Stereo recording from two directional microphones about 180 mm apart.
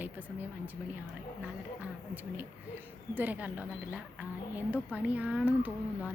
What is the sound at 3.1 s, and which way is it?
Speech, 10° right (ahead or behind).